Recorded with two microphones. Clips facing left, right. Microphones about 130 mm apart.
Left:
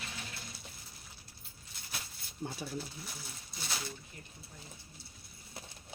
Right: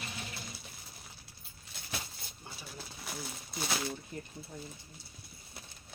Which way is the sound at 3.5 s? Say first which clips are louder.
Right 7 dB; 70° right (ahead or behind).